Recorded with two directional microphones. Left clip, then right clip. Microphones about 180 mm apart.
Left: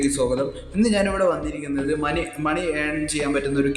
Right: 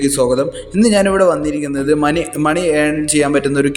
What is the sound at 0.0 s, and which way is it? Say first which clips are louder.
A man's voice: right 8 dB; 40° right (ahead or behind).